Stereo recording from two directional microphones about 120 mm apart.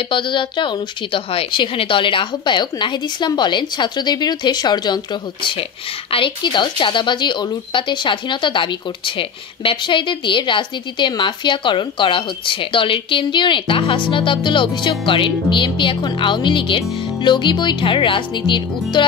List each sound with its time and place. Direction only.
0.1 s a woman's voice: 45° left (ahead or behind)